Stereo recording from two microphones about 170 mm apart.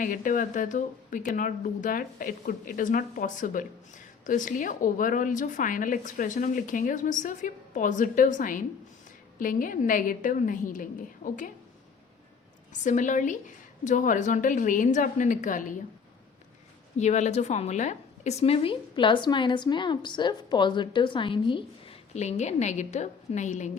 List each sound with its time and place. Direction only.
0.0 s a woman's voice: 50° left (ahead or behind)
12.8 s a woman's voice: 45° left (ahead or behind)
17.0 s a woman's voice: 45° left (ahead or behind)